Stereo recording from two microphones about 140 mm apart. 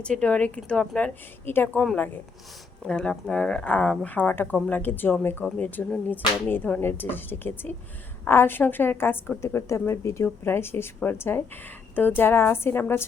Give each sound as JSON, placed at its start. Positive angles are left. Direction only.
{"t": 0.0, "sound": "a woman's voice", "side_deg": 10}